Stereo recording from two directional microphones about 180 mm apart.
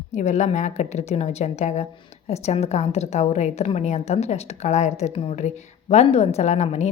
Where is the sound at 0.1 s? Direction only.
40° left (ahead or behind).